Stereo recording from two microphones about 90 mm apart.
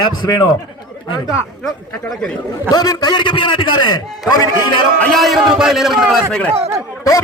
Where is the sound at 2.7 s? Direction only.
45° left (ahead or behind).